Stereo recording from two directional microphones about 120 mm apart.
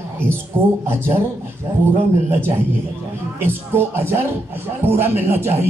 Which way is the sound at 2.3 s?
15° right (ahead or behind).